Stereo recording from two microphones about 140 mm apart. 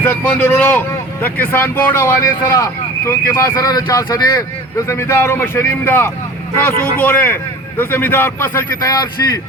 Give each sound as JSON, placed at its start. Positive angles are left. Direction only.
{"t": 0.0, "sound": "a man's voice", "side_deg": 10}